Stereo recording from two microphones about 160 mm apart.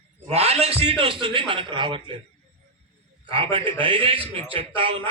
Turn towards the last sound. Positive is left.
turn(degrees=-35)  # may be behind; listen again after turning